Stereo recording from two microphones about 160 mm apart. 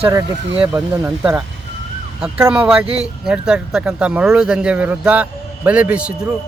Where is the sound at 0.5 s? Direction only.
25° right (ahead or behind).